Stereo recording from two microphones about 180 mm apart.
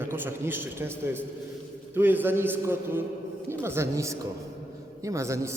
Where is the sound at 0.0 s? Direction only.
10° right (ahead or behind).